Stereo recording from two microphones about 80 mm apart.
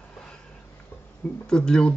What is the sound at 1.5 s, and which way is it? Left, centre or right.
Speech, centre.